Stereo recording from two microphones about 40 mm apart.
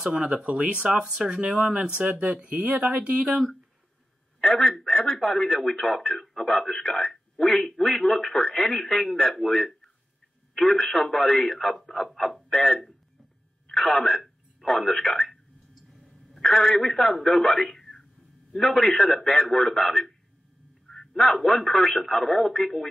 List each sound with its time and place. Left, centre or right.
0.1 s speech: right
4.4 s speech: centre
12.4 s speech: centre
15.9 s a sound: centre
16.9 s a man's voice: centre